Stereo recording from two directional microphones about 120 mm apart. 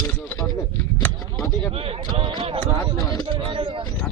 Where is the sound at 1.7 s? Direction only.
55° right (ahead or behind).